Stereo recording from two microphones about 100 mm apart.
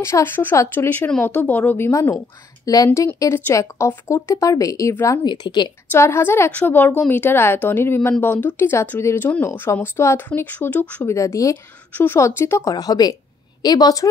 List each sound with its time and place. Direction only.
0.0 s speech: 25° left (ahead or behind)
1.7 s speech: 25° left (ahead or behind)
5.2 s speech: 50° left (ahead or behind)
5.9 s speech: 25° left (ahead or behind)
11.1 s speech: 30° left (ahead or behind)
11.9 s speech: 20° left (ahead or behind)
12.7 s speech: 40° left (ahead or behind)